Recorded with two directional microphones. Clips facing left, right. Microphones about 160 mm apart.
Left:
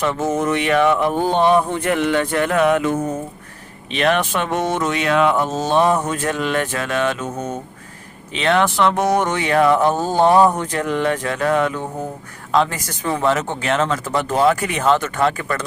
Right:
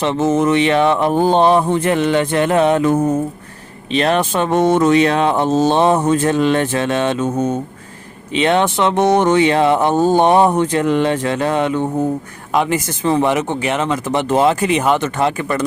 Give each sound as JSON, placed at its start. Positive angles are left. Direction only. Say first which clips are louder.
{"t": 0.0, "sound": "speech", "louder": "right 4 dB", "side_deg": -25}
{"t": 3.9, "sound": "speech", "louder": "right 3 dB", "side_deg": -35}
{"t": 8.4, "sound": "speech", "louder": "right 2 dB", "side_deg": -20}